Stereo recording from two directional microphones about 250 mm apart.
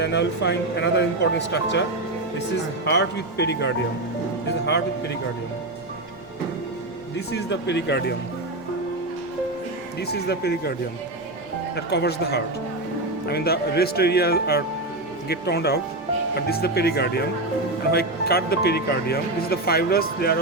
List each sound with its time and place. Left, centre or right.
0.0 s speech: left
2.8 s speech: left
7.3 s speech: left
10.0 s speech: left
11.9 s speech: left